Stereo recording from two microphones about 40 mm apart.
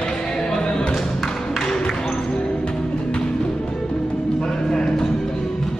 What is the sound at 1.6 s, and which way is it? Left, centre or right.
Music, centre.